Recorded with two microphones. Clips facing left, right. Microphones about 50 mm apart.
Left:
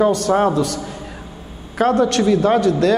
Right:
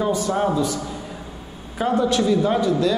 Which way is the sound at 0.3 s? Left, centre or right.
Left.